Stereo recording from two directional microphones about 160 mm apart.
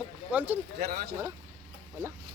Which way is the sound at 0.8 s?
80° right.